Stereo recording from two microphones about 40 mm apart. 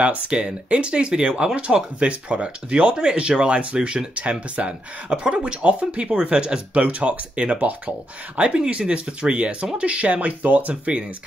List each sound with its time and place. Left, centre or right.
0.3 s speech: right
6.8 s speech: right